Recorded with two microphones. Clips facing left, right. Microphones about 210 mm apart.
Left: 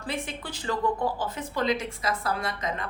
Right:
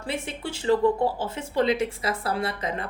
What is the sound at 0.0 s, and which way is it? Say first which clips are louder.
Speech: right 2 dB; 25° right (ahead or behind).